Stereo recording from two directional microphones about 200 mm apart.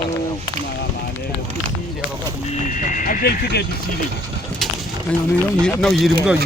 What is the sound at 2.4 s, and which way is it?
Speech, 40° left (ahead or behind).